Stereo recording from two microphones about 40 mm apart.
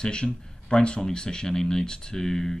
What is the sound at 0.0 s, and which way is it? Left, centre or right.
Speech, left.